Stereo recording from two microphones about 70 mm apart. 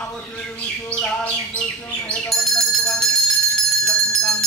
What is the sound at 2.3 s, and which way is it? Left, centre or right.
Bicycle bell, centre.